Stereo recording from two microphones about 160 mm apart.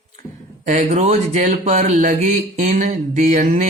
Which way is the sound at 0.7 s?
45° right (ahead or behind).